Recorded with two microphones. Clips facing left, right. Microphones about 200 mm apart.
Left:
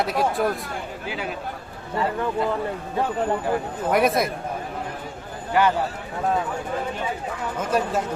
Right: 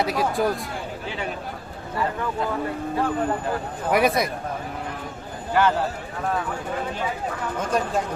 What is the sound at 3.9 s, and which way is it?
Speech, centre (ahead or behind).